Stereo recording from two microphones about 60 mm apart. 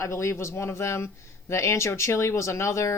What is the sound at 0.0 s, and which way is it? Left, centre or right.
Speech, left.